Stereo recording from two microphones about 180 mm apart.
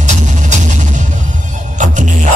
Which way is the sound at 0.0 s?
40° right (ahead or behind).